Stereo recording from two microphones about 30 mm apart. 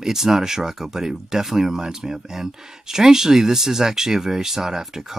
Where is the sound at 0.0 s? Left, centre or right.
Centre.